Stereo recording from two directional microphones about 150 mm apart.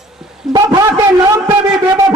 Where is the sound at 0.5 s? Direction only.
25° right (ahead or behind).